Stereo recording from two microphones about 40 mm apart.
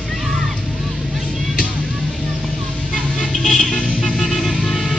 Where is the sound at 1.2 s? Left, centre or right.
Left.